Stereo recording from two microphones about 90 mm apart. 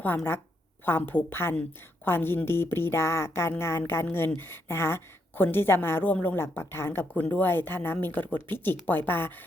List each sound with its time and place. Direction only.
0.9 s a woman's voice: 20° left (ahead or behind)